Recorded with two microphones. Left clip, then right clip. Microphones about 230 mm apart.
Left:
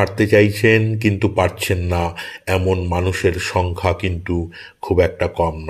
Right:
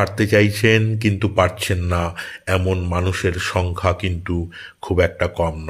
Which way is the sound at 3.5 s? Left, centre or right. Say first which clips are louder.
Left 1 dB; centre.